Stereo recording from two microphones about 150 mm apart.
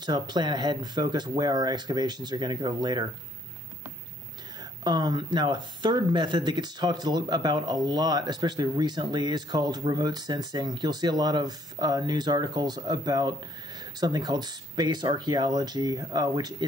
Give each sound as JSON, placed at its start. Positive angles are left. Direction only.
{"t": 0.0, "sound": "speech", "side_deg": -30}
{"t": 4.8, "sound": "speech", "side_deg": -30}